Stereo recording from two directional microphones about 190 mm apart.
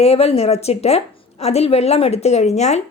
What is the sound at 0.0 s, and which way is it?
Speech, 30° left (ahead or behind).